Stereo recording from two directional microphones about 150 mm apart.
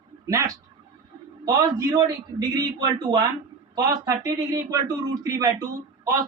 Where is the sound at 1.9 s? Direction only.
25° right (ahead or behind).